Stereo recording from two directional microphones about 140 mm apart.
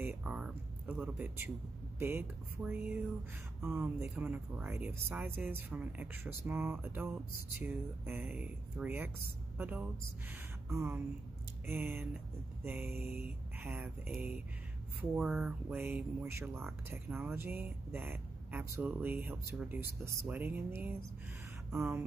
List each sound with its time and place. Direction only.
0.0 s a sound: 15° right (ahead or behind)
0.3 s a woman's voice: 10° right (ahead or behind)
15.3 s speech: 15° right (ahead or behind)